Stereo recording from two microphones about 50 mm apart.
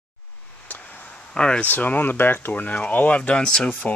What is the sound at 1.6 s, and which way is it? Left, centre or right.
Speech, left.